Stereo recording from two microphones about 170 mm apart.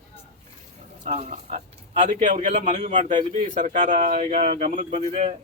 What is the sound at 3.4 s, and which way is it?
A man's voice, 45° right (ahead or behind).